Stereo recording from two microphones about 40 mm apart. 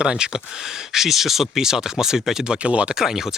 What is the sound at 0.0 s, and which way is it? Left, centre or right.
Speech, right.